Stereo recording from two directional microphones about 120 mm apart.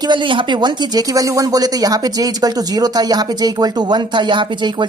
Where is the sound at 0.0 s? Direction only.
40° right (ahead or behind).